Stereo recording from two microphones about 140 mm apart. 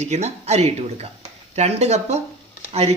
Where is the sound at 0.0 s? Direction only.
55° right (ahead or behind).